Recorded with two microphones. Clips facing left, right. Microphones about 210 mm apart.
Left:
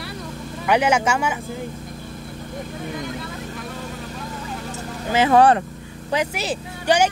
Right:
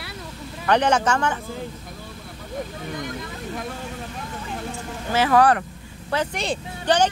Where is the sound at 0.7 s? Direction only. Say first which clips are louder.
Left 1 dB; 10° left (ahead or behind).